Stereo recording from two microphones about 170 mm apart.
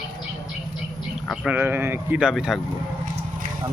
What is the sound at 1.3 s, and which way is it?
Speech, 5° right (ahead or behind).